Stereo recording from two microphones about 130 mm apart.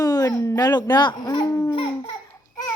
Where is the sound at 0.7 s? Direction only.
35° left (ahead or behind).